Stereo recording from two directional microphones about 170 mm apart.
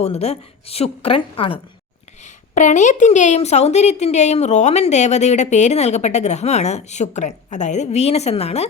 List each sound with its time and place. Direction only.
0.0 s a woman's voice: 35° left (ahead or behind)
2.2 s a woman's voice: 45° left (ahead or behind)